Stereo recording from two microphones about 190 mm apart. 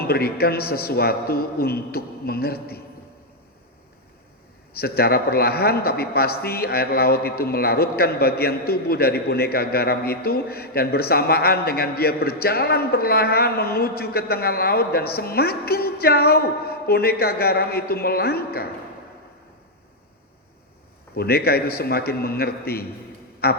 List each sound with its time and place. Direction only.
0.0 s a man's voice: 55° left (ahead or behind)
4.8 s a man's voice: 55° left (ahead or behind)
21.2 s a man's voice: 55° left (ahead or behind)